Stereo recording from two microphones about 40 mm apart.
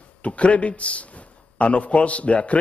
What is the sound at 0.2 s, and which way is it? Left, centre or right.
A man's voice, left.